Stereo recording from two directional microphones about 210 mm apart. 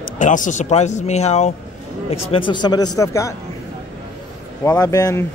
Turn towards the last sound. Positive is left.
turn(degrees=15)  # may be behind; listen again after turning